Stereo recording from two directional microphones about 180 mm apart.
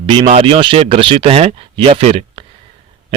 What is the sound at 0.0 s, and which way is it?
A man's voice, 30° right (ahead or behind).